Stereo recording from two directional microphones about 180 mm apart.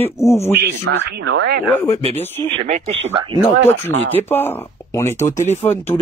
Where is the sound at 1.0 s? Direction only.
85° right.